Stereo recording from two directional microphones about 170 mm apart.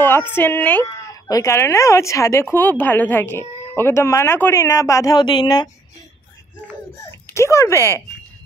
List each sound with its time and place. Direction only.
0.0 s speech: 15° left (ahead or behind)
7.1 s speech: 15° left (ahead or behind)